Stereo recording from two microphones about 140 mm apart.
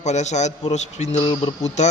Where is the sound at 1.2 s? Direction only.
35° left (ahead or behind).